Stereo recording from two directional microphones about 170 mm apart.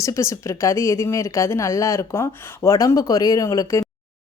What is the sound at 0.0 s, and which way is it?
Speech, 15° left (ahead or behind).